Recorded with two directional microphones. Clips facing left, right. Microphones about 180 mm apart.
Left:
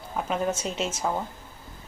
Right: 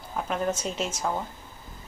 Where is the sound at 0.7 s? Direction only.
25° left (ahead or behind).